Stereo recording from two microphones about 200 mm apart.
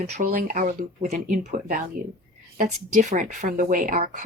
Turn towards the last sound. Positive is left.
turn(degrees=-45)  # may be behind; listen again after turning